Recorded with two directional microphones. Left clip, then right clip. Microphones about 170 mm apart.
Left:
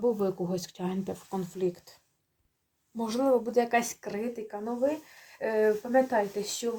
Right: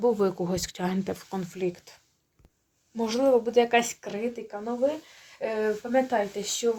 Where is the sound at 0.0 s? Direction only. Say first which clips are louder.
Right 4 dB; 35° right (ahead or behind).